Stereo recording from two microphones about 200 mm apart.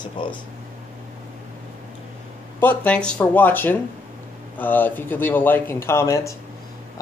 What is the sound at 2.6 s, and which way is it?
Speech, 10° left (ahead or behind).